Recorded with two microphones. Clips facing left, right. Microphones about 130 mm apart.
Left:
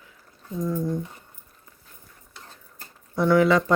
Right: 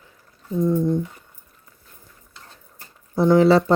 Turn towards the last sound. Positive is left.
turn(degrees=-30)  # may be behind; listen again after turning